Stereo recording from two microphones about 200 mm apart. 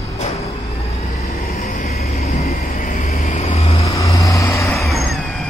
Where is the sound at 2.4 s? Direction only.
45° left (ahead or behind); by 3.9 s 30° left (ahead or behind).